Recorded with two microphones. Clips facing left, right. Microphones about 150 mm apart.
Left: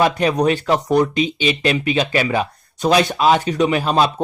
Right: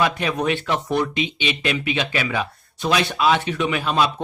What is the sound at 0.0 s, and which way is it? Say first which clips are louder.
Speech: left 5 dB; 40° left (ahead or behind).